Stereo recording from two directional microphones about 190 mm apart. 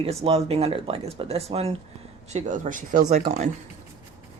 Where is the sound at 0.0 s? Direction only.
35° right (ahead or behind).